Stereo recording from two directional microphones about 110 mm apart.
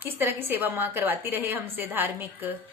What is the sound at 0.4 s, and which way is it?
A woman's voice, 20° right (ahead or behind).